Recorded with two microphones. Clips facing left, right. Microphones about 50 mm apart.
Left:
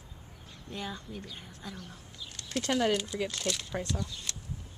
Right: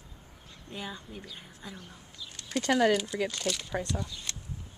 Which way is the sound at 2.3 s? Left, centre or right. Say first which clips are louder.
Right 2 dB; centre.